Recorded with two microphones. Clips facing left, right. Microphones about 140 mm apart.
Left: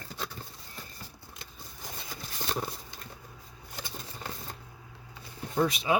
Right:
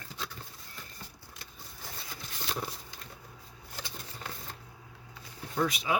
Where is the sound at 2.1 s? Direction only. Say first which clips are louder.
Left 3 dB; 40° left (ahead or behind).